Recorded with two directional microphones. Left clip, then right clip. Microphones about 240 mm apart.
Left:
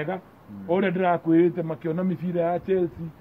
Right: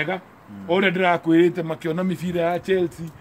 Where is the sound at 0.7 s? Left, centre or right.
Centre.